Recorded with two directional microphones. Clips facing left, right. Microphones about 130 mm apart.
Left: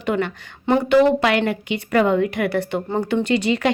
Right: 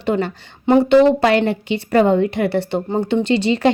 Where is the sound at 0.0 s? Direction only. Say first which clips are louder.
Right 2 dB; 35° right (ahead or behind).